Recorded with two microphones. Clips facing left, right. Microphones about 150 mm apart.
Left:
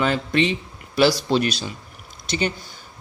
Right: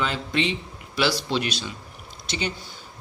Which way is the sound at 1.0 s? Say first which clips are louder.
Left 6 dB; 40° left (ahead or behind).